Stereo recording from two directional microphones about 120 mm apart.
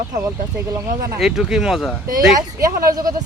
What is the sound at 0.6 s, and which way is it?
Speech, 25° right (ahead or behind).